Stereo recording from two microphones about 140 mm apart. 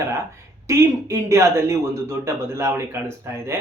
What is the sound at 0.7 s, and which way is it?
Speech, 20° right (ahead or behind).